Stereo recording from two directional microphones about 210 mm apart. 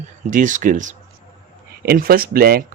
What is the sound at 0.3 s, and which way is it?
Speech, 35° right (ahead or behind).